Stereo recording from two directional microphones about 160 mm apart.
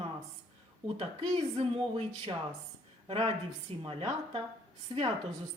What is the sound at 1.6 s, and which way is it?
Speech, 35° right (ahead or behind).